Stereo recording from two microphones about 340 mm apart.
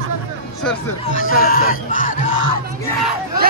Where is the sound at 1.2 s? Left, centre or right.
Left.